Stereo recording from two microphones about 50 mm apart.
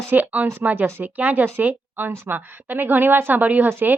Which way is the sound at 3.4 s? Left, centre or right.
Right.